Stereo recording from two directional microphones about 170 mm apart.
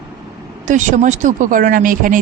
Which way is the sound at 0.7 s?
45° right (ahead or behind).